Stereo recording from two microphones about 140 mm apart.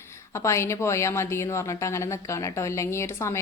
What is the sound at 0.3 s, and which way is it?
A woman's voice, 20° left (ahead or behind).